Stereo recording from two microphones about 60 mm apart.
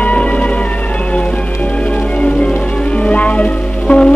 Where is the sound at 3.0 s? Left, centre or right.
Left.